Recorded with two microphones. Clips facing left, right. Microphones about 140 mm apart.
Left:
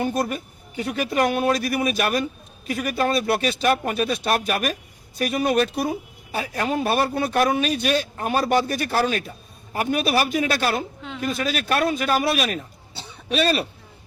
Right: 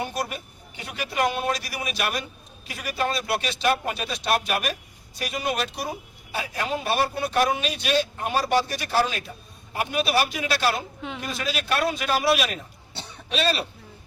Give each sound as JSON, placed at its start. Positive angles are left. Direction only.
{"t": 0.0, "sound": "speech", "side_deg": 50}